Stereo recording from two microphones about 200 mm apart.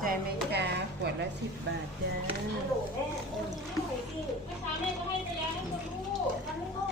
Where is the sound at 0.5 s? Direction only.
55° right (ahead or behind).